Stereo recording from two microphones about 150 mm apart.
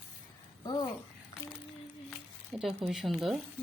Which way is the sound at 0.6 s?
25° left (ahead or behind).